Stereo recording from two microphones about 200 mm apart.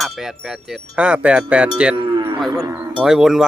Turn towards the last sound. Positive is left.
turn(degrees=0)  # may be behind; listen again after turning